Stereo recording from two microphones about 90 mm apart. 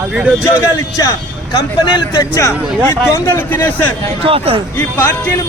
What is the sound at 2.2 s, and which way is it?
Speech, 35° left (ahead or behind).